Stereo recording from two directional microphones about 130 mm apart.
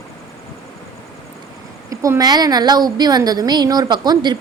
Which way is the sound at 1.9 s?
25° right (ahead or behind).